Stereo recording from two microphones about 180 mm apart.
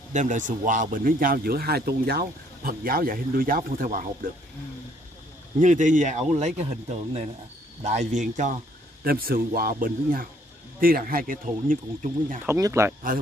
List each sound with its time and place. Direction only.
0.1 s a man's voice: 45° right (ahead or behind)
5.6 s speech: 45° right (ahead or behind)
9.0 s a man's voice: 55° right (ahead or behind)
12.4 s speech: 15° right (ahead or behind)